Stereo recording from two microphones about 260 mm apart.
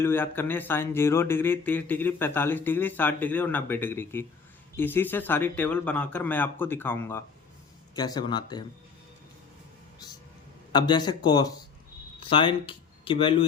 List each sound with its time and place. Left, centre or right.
0.0 s speech: centre
10.7 s speech: centre